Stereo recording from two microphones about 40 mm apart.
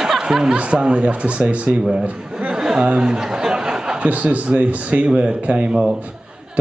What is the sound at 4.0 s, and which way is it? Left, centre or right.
Speech, right.